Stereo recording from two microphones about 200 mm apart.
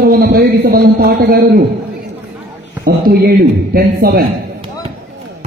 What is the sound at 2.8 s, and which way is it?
A man's voice, 55° right (ahead or behind).